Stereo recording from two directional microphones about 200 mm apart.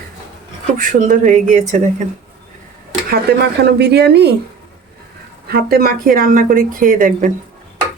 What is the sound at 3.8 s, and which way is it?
Speech, 55° right (ahead or behind).